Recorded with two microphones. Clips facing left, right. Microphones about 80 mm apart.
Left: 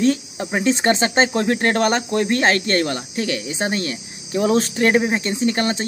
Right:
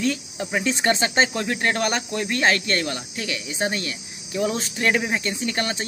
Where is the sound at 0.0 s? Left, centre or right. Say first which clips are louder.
Left 6 dB; left.